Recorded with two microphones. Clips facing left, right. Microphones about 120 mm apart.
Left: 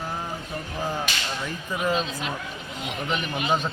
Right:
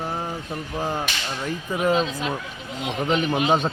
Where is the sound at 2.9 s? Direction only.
30° right (ahead or behind).